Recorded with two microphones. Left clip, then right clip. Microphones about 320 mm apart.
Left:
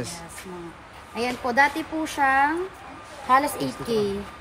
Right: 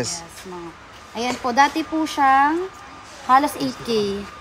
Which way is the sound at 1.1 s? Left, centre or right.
Centre.